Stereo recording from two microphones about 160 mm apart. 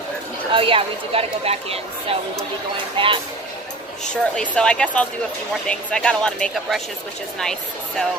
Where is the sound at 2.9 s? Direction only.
35° right (ahead or behind).